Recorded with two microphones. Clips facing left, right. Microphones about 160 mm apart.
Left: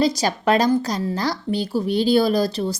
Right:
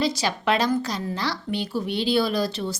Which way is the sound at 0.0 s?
40° left (ahead or behind).